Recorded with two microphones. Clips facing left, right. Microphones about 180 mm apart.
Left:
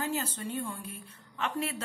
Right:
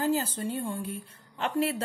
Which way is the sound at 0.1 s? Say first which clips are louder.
Right 5 dB; 30° right (ahead or behind).